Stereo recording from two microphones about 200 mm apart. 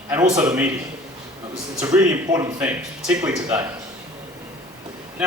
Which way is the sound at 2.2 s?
20° right (ahead or behind).